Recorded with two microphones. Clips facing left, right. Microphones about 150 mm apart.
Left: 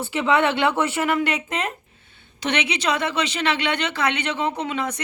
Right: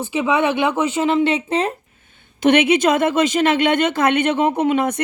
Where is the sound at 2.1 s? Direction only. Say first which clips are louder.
Right 10 dB; 50° right (ahead or behind).